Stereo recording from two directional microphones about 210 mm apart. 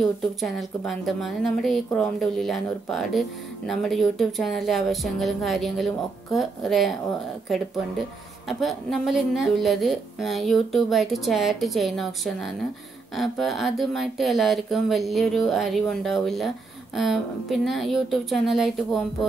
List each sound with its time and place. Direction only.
0.0 s speech: centre (ahead or behind)